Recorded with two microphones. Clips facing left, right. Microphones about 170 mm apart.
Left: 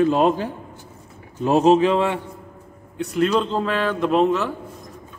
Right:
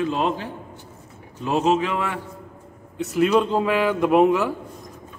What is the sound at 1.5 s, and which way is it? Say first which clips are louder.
Speech: left 5 dB; 35° left (ahead or behind).